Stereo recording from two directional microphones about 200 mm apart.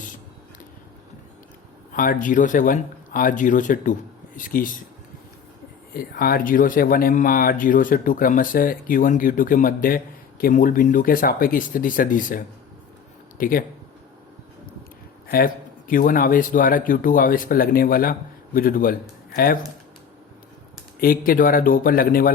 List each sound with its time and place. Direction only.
1.9 s speech: 45° left (ahead or behind)
5.9 s speech: 45° left (ahead or behind)
15.3 s speech: 45° left (ahead or behind)
21.0 s speech: 45° left (ahead or behind)